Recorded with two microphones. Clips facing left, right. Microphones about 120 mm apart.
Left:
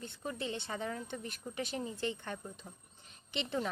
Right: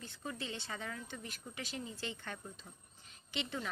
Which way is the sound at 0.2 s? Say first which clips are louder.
Left 4 dB; 25° left (ahead or behind).